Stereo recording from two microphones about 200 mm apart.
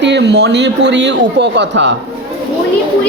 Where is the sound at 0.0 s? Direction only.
60° right (ahead or behind).